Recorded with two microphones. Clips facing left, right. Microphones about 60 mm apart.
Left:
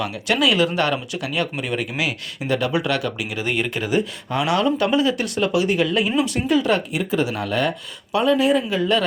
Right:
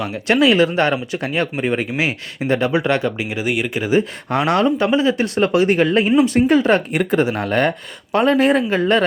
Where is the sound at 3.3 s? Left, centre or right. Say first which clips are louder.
Even; centre.